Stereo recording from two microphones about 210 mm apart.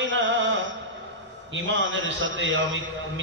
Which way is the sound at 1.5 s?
65° right (ahead or behind).